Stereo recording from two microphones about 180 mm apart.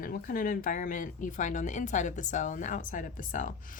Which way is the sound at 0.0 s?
55° left (ahead or behind).